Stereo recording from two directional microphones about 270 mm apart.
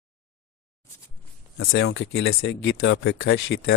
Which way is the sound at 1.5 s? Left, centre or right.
Left.